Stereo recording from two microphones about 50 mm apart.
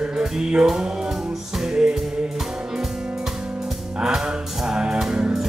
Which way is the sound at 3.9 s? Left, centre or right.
Centre.